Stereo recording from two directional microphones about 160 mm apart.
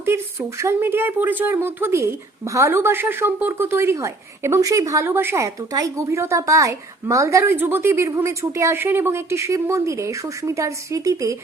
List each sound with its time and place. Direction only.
0.0 s speech: 15° right (ahead or behind)